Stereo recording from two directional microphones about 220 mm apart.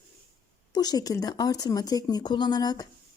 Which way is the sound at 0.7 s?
15° left (ahead or behind).